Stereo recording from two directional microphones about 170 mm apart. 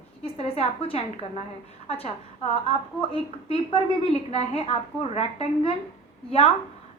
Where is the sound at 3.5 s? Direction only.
35° left (ahead or behind).